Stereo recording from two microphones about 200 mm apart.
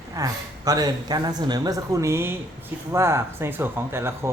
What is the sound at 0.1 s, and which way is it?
Speech, 15° right (ahead or behind).